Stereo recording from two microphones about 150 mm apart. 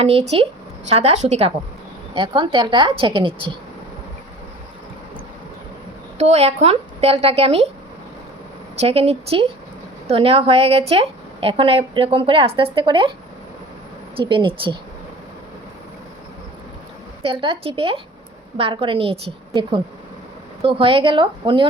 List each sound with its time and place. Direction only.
0.0 s a woman's voice: 40° right (ahead or behind)
2.1 s a woman's voice: 35° right (ahead or behind)
6.1 s speech: 45° right (ahead or behind)
8.8 s a woman's voice: 40° right (ahead or behind)
14.2 s a woman's voice: 35° right (ahead or behind)
17.2 s a woman's voice: 40° right (ahead or behind)